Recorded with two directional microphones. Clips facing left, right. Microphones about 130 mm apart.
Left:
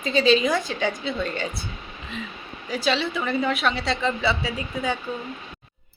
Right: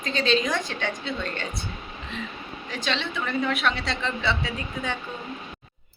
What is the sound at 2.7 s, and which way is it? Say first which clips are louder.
A woman's voice: left 6 dB; 5° left (ahead or behind).